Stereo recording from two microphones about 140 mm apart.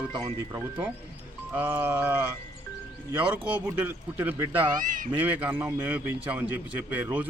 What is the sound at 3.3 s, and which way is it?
A man's voice, 15° right (ahead or behind).